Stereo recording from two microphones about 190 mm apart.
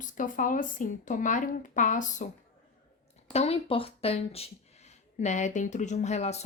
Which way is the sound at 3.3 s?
30° left (ahead or behind).